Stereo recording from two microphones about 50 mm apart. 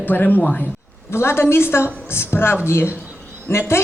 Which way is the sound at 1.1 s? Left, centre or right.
Left.